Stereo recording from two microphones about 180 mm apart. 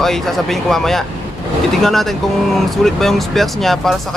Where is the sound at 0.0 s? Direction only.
Centre (ahead or behind).